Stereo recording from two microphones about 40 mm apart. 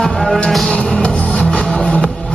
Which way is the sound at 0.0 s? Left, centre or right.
Centre.